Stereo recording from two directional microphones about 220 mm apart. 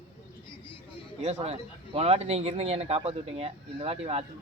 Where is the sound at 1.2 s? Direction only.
30° right (ahead or behind).